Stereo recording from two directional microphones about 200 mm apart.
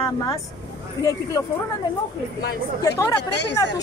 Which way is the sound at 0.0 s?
15° left (ahead or behind).